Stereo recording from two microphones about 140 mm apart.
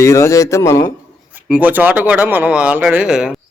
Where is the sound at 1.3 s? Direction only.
10° right (ahead or behind).